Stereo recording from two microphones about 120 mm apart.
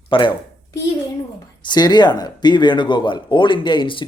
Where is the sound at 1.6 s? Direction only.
35° left (ahead or behind).